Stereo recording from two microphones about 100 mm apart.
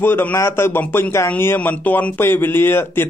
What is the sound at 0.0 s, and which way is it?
A man's voice, 20° left (ahead or behind).